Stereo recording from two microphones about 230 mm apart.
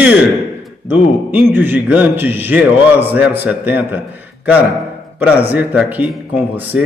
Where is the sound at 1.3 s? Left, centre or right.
Centre.